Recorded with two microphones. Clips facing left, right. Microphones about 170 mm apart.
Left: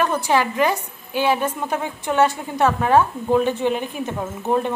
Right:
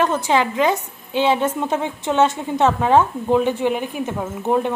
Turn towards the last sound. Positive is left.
turn(degrees=-15)  # may be behind; listen again after turning